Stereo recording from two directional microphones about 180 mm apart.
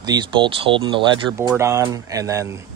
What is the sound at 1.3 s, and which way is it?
Speech, 15° right (ahead or behind).